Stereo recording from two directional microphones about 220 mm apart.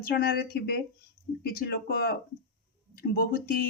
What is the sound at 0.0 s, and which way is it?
Speech, 45° left (ahead or behind).